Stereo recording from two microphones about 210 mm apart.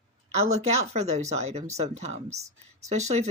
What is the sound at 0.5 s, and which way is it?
Speech, 30° right (ahead or behind).